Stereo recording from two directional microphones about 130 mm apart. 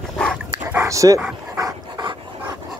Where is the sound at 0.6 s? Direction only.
20° right (ahead or behind).